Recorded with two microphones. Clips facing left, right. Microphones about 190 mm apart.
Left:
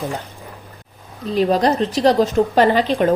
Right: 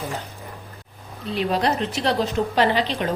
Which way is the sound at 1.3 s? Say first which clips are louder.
Left 6 dB; 40° left (ahead or behind).